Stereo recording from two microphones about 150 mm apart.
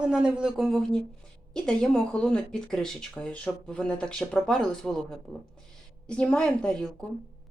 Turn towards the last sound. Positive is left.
turn(degrees=5)  # may be behind; listen again after turning